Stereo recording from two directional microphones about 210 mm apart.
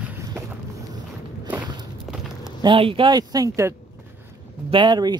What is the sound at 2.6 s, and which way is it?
Speech, 25° right (ahead or behind).